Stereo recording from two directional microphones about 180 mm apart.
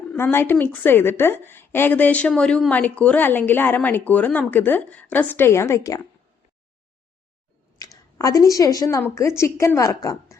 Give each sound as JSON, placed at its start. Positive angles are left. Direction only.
{"t": 0.1, "sound": "a woman's voice", "side_deg": 10}
{"t": 7.8, "sound": "a woman's voice", "side_deg": 20}